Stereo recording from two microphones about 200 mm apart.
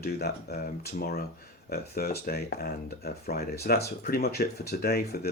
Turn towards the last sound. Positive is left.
turn(degrees=50)  # may be behind; listen again after turning